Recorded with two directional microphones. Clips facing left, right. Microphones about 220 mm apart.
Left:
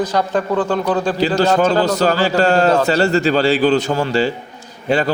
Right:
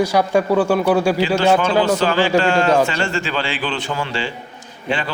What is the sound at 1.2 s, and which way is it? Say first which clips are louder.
A man's voice: left 1 dB; 40° left (ahead or behind).